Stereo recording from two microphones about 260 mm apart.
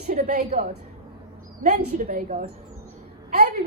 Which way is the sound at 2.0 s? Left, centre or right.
Right.